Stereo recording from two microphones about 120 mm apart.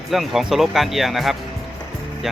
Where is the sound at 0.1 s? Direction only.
Centre (ahead or behind).